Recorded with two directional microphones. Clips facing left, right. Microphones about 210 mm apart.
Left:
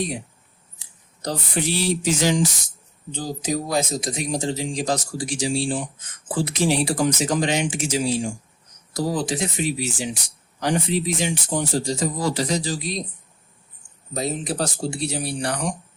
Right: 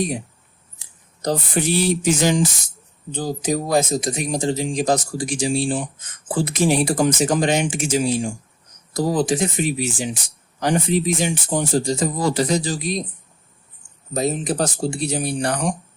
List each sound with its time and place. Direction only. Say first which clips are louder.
1.2 s speech: right 4 dB; 50° right (ahead or behind)
14.1 s speech: right 4 dB; 45° right (ahead or behind)